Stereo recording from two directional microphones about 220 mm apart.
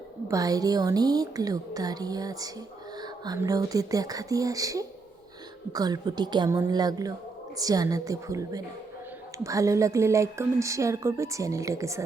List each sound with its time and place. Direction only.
0.3 s speech: 15° right (ahead or behind)